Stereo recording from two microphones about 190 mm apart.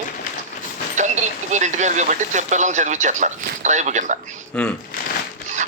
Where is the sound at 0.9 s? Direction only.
40° right (ahead or behind).